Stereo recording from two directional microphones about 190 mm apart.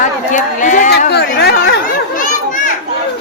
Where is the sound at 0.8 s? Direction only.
60° left (ahead or behind).